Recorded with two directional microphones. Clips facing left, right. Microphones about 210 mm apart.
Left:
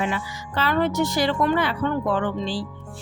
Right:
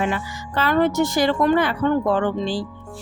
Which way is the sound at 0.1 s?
50° right (ahead or behind).